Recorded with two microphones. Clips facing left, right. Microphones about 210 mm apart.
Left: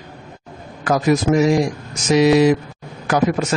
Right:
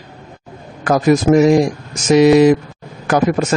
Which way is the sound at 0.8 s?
45° right (ahead or behind).